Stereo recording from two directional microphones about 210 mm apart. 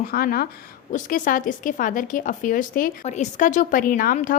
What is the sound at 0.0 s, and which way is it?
A woman's voice, 45° left (ahead or behind).